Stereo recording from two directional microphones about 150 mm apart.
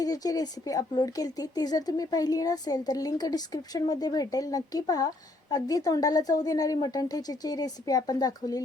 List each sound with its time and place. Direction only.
0.0 s speech: 25° left (ahead or behind)